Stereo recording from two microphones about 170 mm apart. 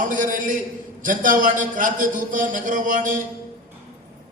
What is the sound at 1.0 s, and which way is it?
A man's voice, 50° right (ahead or behind).